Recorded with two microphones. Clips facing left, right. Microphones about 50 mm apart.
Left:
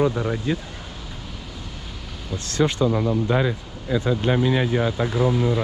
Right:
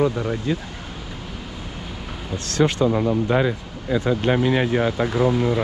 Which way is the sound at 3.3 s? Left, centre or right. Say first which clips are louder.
Right 2 dB; right.